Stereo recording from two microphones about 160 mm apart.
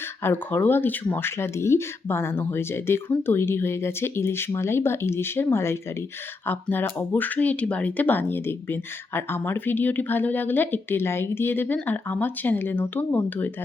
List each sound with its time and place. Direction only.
0.2 s speech: 15° left (ahead or behind)